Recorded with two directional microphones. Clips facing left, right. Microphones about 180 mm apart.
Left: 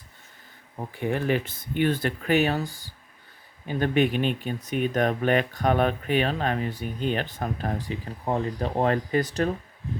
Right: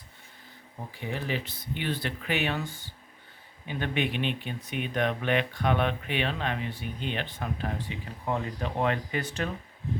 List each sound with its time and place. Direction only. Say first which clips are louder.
0.9 s speech: left 8 dB; 55° left (ahead or behind)